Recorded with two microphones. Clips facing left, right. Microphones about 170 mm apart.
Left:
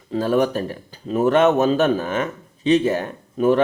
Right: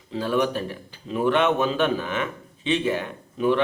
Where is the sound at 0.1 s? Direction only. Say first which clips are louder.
Left 5 dB; 45° left (ahead or behind).